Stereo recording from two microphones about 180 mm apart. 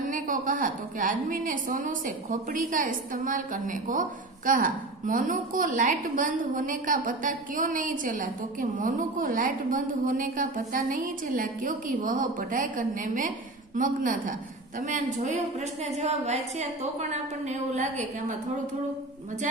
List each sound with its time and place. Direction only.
0.1 s a woman's voice: 45° right (ahead or behind)